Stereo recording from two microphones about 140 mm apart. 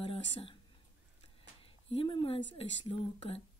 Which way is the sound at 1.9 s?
40° left (ahead or behind).